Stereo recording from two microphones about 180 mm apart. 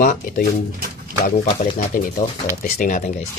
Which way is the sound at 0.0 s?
50° left (ahead or behind).